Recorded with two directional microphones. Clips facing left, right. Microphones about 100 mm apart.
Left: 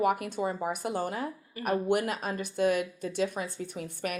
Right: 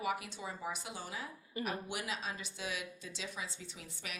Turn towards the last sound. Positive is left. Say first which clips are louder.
# left 14 dB
turn(degrees=55)  # may be behind; listen again after turning